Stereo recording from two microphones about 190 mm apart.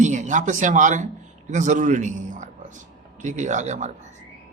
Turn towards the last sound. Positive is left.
turn(degrees=-40)  # may be behind; listen again after turning